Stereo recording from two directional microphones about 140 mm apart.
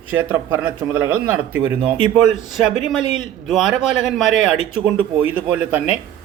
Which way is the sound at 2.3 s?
Centre (ahead or behind).